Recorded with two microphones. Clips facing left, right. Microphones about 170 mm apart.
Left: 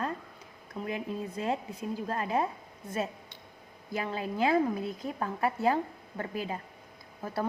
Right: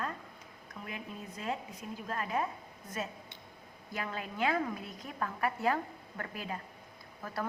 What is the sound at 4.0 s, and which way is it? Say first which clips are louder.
A woman's voice: left 5 dB; 25° left (ahead or behind).